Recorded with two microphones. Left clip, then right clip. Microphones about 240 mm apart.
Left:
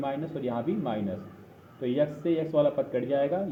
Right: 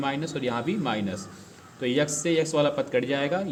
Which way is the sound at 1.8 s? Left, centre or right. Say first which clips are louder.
Right 2 dB; right.